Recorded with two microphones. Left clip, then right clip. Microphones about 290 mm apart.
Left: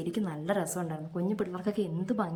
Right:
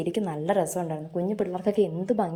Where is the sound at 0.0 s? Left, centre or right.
Centre.